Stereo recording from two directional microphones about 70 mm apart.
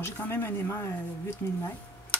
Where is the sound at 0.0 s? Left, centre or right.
Left.